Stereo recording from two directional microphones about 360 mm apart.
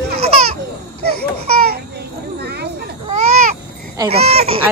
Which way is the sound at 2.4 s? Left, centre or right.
Right.